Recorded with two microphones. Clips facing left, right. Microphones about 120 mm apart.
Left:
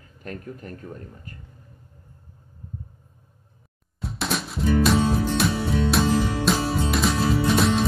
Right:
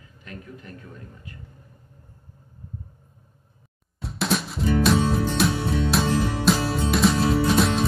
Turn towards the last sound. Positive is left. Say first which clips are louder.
# even
turn(degrees=0)  # may be behind; listen again after turning